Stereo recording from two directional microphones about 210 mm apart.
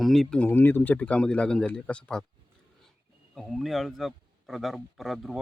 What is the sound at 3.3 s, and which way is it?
A man's voice, centre (ahead or behind).